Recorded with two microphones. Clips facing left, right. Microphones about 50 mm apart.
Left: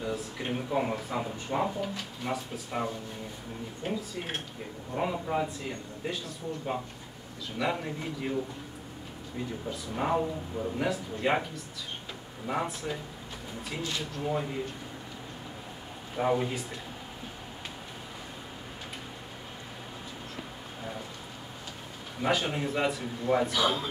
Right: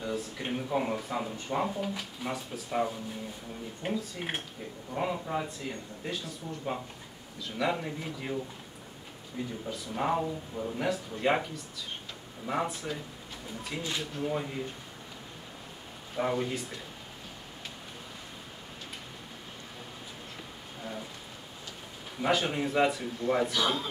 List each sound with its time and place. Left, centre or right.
0.0 s speech: centre
3.8 s speech: centre
4.9 s speech: centre
9.7 s speech: centre
13.8 s speech: centre
14.2 s speech: centre
16.2 s speech: centre
22.2 s speech: centre